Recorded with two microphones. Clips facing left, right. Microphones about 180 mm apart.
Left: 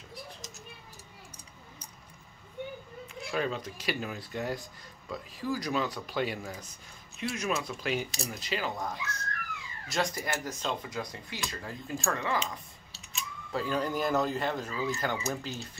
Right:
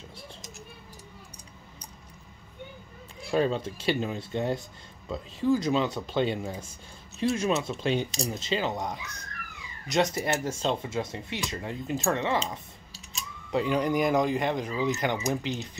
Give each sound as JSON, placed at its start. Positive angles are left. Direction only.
{"t": 3.3, "sound": "speech", "side_deg": -30}